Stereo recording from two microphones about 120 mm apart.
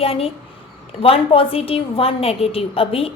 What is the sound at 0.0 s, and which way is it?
A woman's voice, 55° left (ahead or behind).